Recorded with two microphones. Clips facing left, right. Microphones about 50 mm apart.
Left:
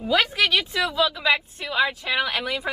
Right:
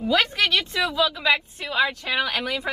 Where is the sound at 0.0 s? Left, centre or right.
Centre.